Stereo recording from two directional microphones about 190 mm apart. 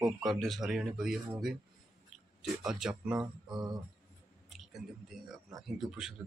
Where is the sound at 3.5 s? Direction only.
20° right (ahead or behind).